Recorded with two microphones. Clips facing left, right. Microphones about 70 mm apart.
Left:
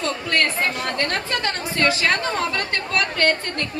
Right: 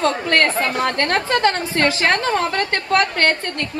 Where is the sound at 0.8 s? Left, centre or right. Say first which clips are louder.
Right 5 dB; right.